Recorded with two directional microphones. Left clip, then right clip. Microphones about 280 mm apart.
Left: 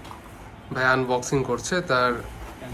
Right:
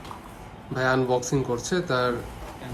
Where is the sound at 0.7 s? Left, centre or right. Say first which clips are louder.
Left 2 dB; centre.